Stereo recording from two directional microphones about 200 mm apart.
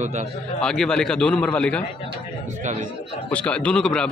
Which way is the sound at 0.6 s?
5° left (ahead or behind).